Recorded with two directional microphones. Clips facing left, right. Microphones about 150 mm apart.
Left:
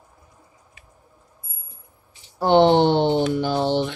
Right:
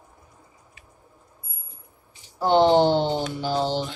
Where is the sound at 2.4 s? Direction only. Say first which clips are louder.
Left 2 dB; 65° left (ahead or behind).